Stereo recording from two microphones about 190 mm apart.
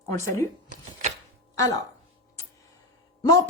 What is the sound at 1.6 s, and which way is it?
Speech, 20° left (ahead or behind).